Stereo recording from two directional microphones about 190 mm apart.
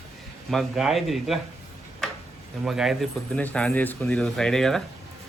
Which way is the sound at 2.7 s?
Centre (ahead or behind).